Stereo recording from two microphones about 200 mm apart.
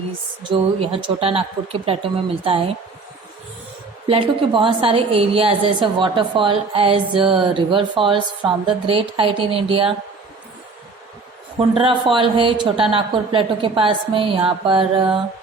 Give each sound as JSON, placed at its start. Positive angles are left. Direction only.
{"t": 0.5, "sound": "a woman's voice", "side_deg": -25}
{"t": 4.0, "sound": "a woman's voice", "side_deg": -25}
{"t": 11.5, "sound": "a woman's voice", "side_deg": -25}